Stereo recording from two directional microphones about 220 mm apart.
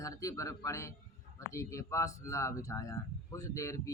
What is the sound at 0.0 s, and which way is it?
A man's voice, 15° left (ahead or behind).